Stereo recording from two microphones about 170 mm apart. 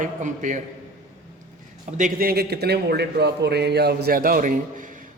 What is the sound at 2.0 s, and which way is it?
Speech, 55° right (ahead or behind).